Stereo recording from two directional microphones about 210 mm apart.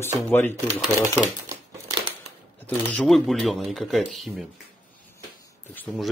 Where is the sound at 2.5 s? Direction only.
5° left (ahead or behind).